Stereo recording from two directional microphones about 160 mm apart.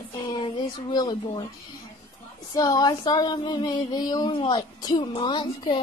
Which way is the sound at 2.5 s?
25° left (ahead or behind).